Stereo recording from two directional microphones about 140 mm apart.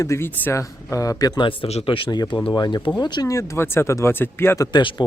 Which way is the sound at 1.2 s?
35° left (ahead or behind).